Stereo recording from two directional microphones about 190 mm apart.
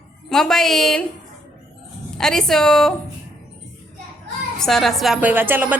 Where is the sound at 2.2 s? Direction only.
Centre (ahead or behind).